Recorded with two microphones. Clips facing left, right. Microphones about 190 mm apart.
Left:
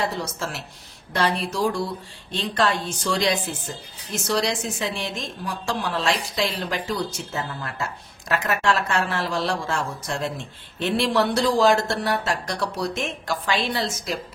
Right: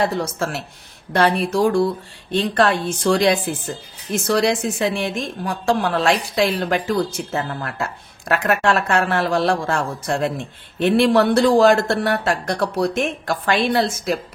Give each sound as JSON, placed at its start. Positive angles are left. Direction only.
{"t": 0.1, "sound": "a woman's voice", "side_deg": -55}